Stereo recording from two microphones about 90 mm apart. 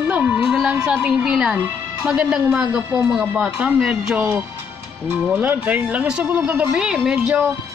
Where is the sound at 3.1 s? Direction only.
15° right (ahead or behind).